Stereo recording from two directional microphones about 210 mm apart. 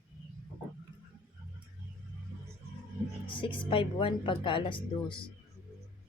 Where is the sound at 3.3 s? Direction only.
25° left (ahead or behind).